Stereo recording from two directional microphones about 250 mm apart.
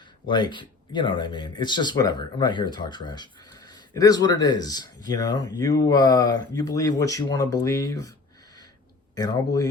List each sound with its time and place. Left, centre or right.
0.3 s speech: centre
9.1 s speech: centre